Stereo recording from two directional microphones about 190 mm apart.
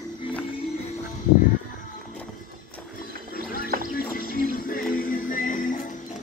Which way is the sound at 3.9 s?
50° left (ahead or behind).